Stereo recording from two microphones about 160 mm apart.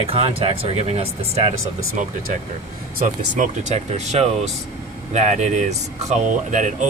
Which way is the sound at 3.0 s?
50° right (ahead or behind).